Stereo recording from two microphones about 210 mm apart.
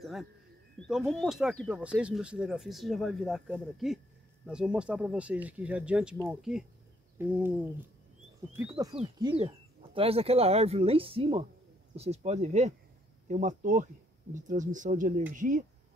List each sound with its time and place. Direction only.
0.0 s speech: centre (ahead or behind)
7.2 s a sound: 10° right (ahead or behind)
9.2 s speech: 25° right (ahead or behind)